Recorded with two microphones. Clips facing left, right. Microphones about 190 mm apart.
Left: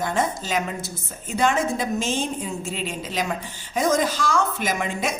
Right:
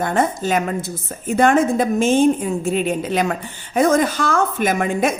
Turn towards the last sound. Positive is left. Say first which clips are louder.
# right 7 dB
turn(degrees=-55)  # may be behind; listen again after turning